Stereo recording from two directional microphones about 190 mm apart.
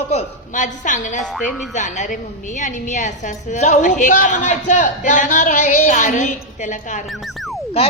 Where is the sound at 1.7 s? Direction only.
40° left (ahead or behind).